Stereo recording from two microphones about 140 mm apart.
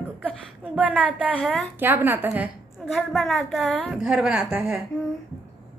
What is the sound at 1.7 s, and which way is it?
Speech, 15° right (ahead or behind).